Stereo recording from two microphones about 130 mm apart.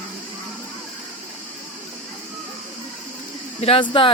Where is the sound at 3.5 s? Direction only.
50° left (ahead or behind).